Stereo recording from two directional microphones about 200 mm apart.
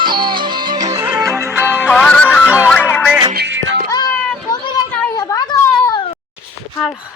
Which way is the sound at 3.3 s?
65° right (ahead or behind).